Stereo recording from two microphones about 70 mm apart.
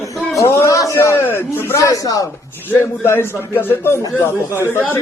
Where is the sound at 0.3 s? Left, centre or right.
Left.